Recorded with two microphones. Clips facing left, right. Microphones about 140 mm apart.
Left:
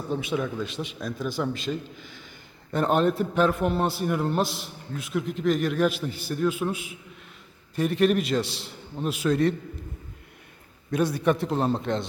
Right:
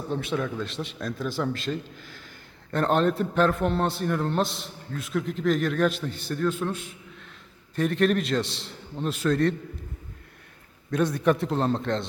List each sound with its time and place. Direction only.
0.1 s a man's voice: 5° left (ahead or behind)
10.9 s a man's voice: 5° left (ahead or behind)